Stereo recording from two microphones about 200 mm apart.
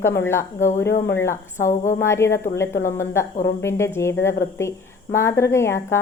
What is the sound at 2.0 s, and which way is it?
A woman's voice, 15° left (ahead or behind).